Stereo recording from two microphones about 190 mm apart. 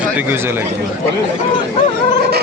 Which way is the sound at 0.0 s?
10° right (ahead or behind).